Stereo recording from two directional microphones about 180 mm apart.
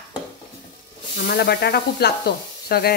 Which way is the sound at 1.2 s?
65° left (ahead or behind).